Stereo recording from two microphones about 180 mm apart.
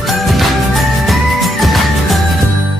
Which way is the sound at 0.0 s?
Centre (ahead or behind).